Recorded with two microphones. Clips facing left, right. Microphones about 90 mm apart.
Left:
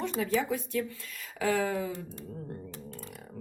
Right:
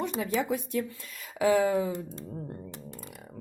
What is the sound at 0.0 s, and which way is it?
Speech, 15° right (ahead or behind).